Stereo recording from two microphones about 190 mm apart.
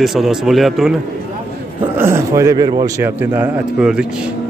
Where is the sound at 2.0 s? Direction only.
15° right (ahead or behind).